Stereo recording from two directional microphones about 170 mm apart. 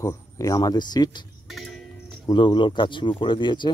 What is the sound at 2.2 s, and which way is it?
Speech, 30° left (ahead or behind).